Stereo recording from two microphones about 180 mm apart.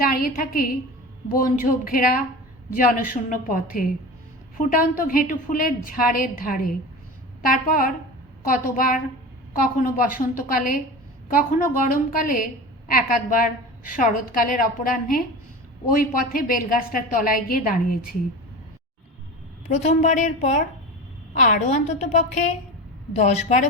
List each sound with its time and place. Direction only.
0.0 s a woman's voice: 50° left (ahead or behind)
19.6 s a woman's voice: 40° left (ahead or behind)